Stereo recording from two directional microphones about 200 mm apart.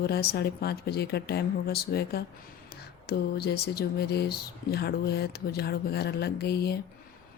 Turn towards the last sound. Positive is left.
turn(degrees=55)  # may be behind; listen again after turning